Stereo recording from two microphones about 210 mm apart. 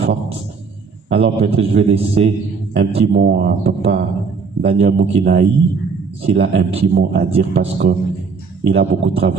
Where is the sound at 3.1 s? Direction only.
50° right (ahead or behind).